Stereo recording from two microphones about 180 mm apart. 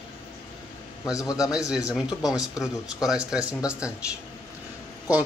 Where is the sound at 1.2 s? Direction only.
20° left (ahead or behind).